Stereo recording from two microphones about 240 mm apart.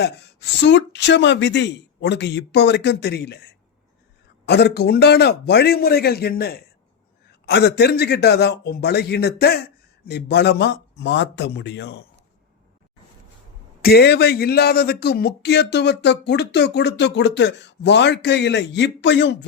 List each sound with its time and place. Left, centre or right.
0.0 s a man's voice: left
13.8 s speech: left